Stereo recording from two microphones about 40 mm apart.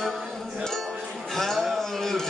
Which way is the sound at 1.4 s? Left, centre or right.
Centre.